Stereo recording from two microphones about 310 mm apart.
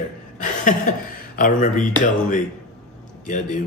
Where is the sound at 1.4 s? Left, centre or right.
Left.